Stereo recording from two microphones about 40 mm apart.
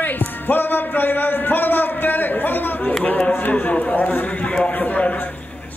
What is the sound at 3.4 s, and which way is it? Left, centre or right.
Speech, left.